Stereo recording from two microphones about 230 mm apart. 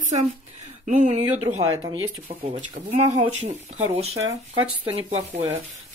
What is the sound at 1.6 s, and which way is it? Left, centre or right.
Speech, centre.